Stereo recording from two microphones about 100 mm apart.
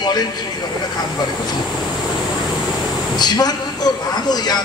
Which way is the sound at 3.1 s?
45° left (ahead or behind).